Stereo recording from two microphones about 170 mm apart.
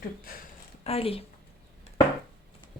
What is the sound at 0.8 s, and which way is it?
Speech, 35° left (ahead or behind).